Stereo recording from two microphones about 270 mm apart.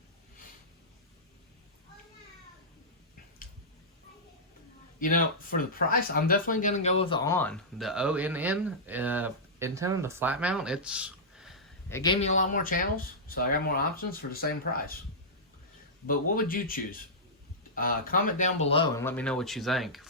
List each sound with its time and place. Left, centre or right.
4.9 s speech: left; by 11.6 s centre
11.9 s speech: centre; by 14.9 s left
16.0 s speech: left
19.0 s speech: centre